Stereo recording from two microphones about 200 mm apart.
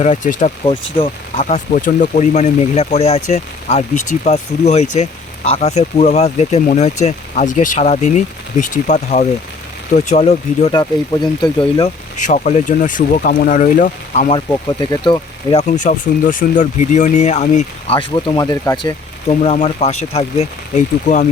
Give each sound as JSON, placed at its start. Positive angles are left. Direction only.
{"t": 0.0, "sound": "speech", "side_deg": 40}
{"t": 0.6, "sound": "speech", "side_deg": 25}
{"t": 1.4, "sound": "speech", "side_deg": 40}
{"t": 11.2, "sound": "speech", "side_deg": 5}
{"t": 11.8, "sound": "speech", "side_deg": 35}
{"t": 15.6, "sound": "speech", "side_deg": 40}
{"t": 19.3, "sound": "speech", "side_deg": 30}